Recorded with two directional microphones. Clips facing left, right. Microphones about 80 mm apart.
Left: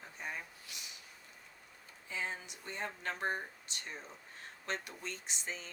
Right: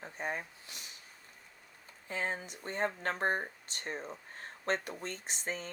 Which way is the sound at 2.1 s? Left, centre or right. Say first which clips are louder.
Right 4 dB; right.